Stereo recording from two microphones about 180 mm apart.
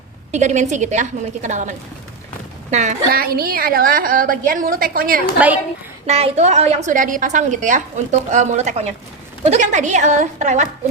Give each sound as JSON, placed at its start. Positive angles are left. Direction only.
{"t": 0.3, "sound": "a woman's voice", "side_deg": -40}
{"t": 3.1, "sound": "a woman's voice", "side_deg": -55}
{"t": 5.4, "sound": "a woman's voice", "side_deg": -10}
{"t": 6.1, "sound": "a woman's voice", "side_deg": -35}